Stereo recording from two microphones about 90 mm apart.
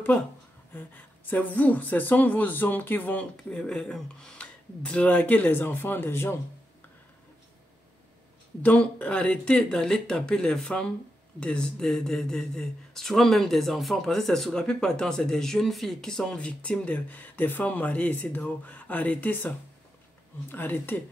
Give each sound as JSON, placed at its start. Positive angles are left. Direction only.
{"t": 0.7, "sound": "speech", "side_deg": 20}
{"t": 8.6, "sound": "speech", "side_deg": 15}